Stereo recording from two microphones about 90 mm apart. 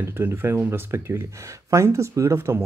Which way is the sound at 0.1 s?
25° right (ahead or behind).